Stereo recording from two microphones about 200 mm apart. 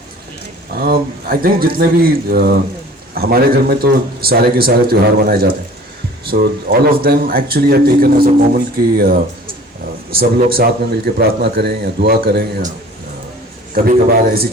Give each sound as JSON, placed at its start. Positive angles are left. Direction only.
{"t": 0.8, "sound": "a man's voice", "side_deg": -50}
{"t": 13.8, "sound": "a man's voice", "side_deg": -50}